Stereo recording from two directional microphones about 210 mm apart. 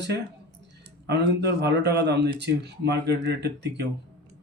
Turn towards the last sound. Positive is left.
turn(degrees=-55)  # may be behind; listen again after turning